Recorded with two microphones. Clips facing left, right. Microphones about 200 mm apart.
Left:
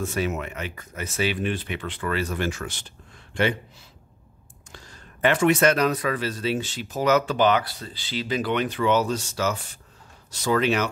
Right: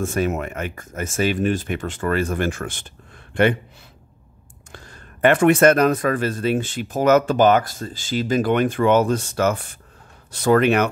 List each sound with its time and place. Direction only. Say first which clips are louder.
0.0 s speech: right 5 dB; 50° right (ahead or behind)
4.7 s speech: right 4 dB; 55° right (ahead or behind)